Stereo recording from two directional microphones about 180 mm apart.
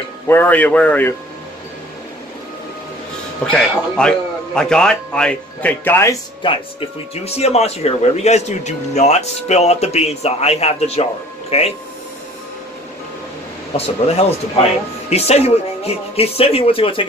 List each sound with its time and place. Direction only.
0.3 s a man's voice: 10° left (ahead or behind)
3.5 s speech: centre (ahead or behind)
6.4 s speech: 30° left (ahead or behind)
13.7 s speech: 35° left (ahead or behind)